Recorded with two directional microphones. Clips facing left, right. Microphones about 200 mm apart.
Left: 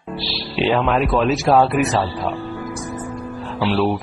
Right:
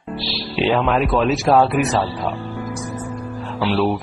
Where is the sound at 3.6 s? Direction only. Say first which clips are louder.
Even; centre (ahead or behind).